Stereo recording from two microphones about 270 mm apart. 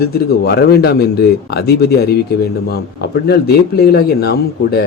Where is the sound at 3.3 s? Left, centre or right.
Left.